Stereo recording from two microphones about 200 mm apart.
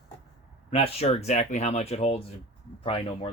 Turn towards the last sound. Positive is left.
turn(degrees=30)  # may be behind; listen again after turning